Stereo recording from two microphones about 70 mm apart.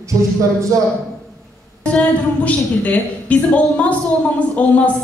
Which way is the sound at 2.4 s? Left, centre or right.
Left.